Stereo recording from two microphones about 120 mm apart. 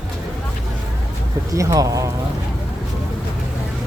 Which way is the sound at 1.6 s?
30° right (ahead or behind).